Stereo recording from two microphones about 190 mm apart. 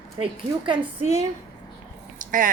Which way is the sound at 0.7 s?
20° right (ahead or behind).